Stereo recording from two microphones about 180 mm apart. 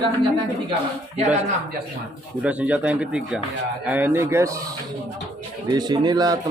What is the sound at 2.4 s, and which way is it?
Speech, 10° right (ahead or behind).